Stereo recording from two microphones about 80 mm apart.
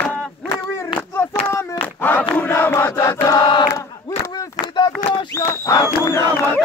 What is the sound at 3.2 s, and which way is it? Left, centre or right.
Choir, left.